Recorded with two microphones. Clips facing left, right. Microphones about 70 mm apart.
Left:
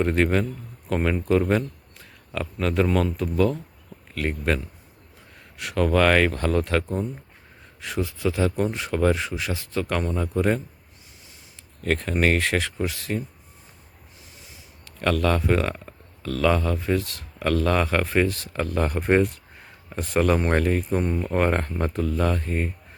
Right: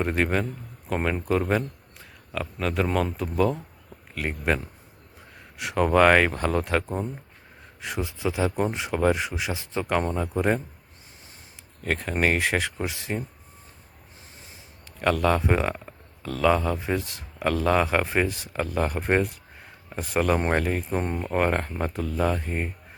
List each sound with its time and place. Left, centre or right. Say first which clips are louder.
0.0 s speech: left 3 dB; centre
11.8 s speech: left 2 dB; centre
14.9 s speech: even; centre
21.0 s speech: left 3 dB; right
21.2 s speech: right 1 dB; centre